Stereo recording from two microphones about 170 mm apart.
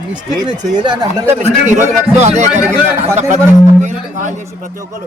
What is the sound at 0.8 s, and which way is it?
Speech, 25° right (ahead or behind).